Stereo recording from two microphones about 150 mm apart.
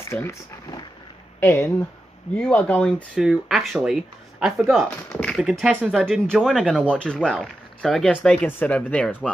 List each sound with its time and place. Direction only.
0.1 s speech: 20° left (ahead or behind); by 4.8 s centre (ahead or behind)
5.1 s a sound: 5° left (ahead or behind)
5.4 s speech: 5° right (ahead or behind)